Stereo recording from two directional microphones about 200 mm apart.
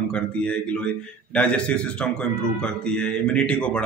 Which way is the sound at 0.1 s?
5° left (ahead or behind).